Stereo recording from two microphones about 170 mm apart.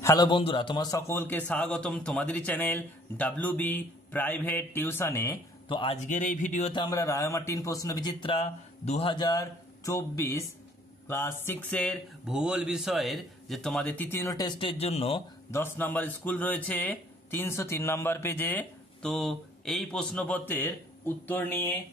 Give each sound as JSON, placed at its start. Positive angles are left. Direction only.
{"t": 0.0, "sound": "a man's voice", "side_deg": 20}
{"t": 5.7, "sound": "a man's voice", "side_deg": 30}
{"t": 6.0, "sound": "speech", "side_deg": 50}
{"t": 6.7, "sound": "a man's voice", "side_deg": 25}
{"t": 15.5, "sound": "a man's voice", "side_deg": 10}